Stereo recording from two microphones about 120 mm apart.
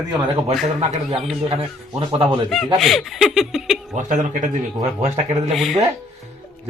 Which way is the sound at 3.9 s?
90° right.